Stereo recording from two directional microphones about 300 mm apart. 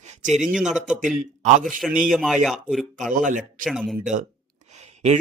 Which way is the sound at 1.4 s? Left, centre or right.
Right.